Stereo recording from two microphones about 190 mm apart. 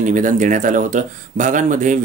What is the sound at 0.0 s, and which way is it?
Speech, 40° right (ahead or behind).